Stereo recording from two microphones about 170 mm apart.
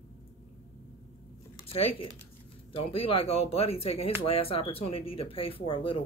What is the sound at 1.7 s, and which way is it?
Speech, 35° left (ahead or behind).